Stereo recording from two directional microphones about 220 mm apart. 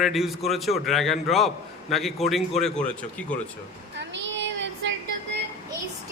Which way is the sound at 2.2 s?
30° left (ahead or behind).